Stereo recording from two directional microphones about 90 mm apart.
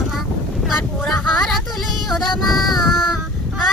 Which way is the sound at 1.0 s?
Centre (ahead or behind).